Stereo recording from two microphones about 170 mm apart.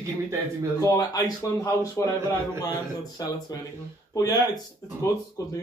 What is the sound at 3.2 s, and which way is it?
Speech, 20° left (ahead or behind).